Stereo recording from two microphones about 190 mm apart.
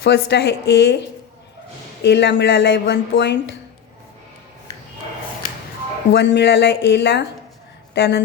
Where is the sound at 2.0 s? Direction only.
65° left (ahead or behind).